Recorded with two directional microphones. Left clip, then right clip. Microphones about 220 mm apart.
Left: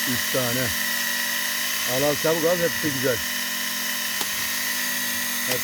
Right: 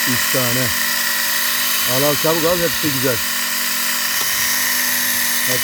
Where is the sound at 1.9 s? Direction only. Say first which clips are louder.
Right 4 dB; 20° right (ahead or behind).